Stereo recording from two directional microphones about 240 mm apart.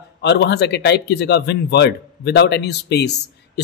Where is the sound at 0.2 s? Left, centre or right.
Left.